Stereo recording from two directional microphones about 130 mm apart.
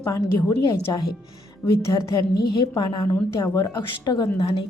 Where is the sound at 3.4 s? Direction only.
20° left (ahead or behind).